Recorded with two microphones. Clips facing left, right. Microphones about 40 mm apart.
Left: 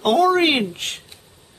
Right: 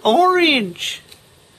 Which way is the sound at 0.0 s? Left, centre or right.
Right.